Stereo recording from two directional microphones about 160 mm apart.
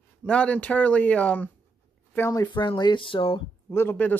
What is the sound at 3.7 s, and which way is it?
Speech, 15° left (ahead or behind).